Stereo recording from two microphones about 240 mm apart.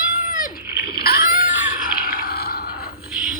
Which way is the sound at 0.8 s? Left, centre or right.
Left.